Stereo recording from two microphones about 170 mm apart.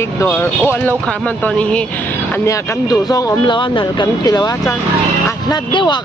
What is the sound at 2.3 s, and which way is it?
Speech, 15° left (ahead or behind).